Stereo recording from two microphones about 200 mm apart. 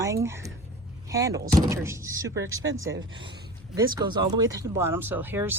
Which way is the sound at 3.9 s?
20° right (ahead or behind).